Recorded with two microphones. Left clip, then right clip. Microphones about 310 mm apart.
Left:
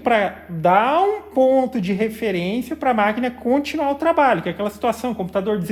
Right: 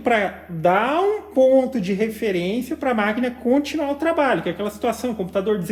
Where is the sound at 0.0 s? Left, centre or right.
Left.